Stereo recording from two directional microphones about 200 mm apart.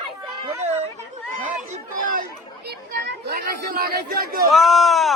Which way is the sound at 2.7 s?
55° right (ahead or behind).